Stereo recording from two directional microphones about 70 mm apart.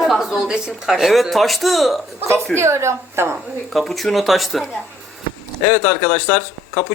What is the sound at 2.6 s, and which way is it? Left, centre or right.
Speech, right.